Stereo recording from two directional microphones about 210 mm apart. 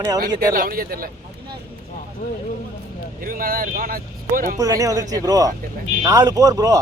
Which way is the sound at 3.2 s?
40° right (ahead or behind).